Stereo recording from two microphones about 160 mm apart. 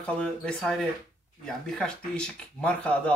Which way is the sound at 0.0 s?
5° left (ahead or behind).